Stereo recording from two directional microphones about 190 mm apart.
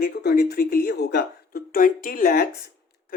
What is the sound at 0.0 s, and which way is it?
A woman's voice, 55° left (ahead or behind).